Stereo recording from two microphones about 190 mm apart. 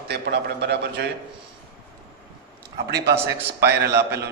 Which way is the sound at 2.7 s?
60° right (ahead or behind).